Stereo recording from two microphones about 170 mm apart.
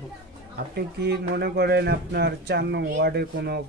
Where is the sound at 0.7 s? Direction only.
70° right (ahead or behind).